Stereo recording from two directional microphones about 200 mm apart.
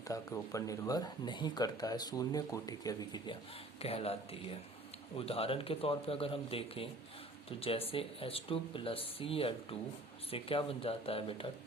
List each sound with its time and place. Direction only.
0.1 s speech: 15° left (ahead or behind)
3.8 s speech: 30° left (ahead or behind)